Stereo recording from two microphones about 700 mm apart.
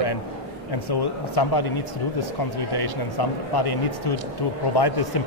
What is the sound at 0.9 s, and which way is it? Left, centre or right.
Speech, left.